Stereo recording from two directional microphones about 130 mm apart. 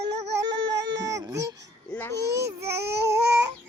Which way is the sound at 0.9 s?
25° right (ahead or behind).